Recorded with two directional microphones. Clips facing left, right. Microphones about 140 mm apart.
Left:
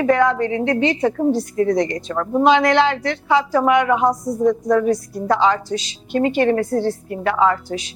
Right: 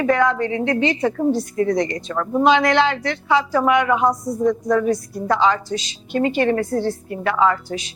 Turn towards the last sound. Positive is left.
turn(degrees=35)  # may be behind; listen again after turning